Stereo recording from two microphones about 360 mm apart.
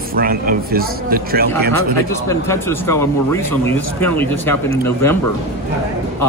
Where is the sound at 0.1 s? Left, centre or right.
Right.